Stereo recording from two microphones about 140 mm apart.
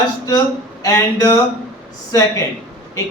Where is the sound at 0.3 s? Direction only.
25° left (ahead or behind).